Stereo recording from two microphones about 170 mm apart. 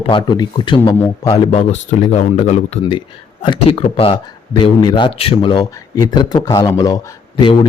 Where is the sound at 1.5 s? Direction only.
40° left (ahead or behind).